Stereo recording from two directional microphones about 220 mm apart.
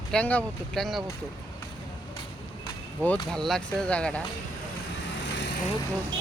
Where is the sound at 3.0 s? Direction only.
Centre (ahead or behind).